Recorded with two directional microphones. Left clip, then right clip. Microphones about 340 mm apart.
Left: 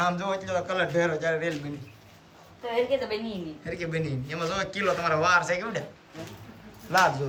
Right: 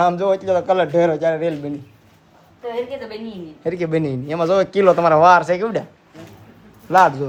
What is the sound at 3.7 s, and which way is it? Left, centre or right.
Speech, centre.